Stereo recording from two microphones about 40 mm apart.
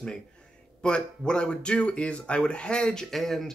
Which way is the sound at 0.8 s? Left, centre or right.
Left.